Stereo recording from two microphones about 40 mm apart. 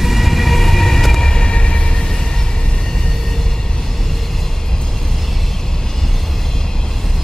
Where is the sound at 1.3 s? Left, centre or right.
Left.